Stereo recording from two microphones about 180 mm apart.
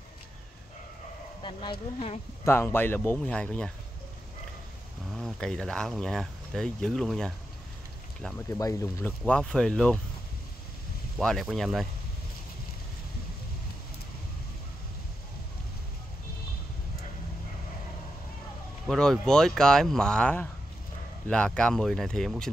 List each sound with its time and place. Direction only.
1.4 s speech: 30° left (ahead or behind)
2.4 s speech: 10° left (ahead or behind)
5.1 s speech: 5° left (ahead or behind)
8.5 s speech: 15° left (ahead or behind)
11.1 s speech: centre (ahead or behind)
18.9 s speech: 5° left (ahead or behind)